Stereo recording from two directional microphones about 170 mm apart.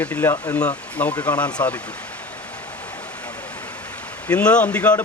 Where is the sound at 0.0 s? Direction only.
15° left (ahead or behind).